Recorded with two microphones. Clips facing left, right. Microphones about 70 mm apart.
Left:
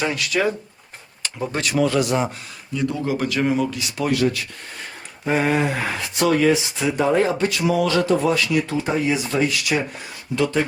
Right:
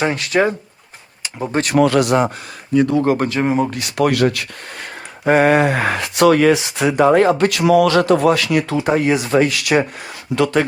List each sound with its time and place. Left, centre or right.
0.0 s speech: right
1.6 s speech: right
3.2 s speech: right
3.8 s speech: right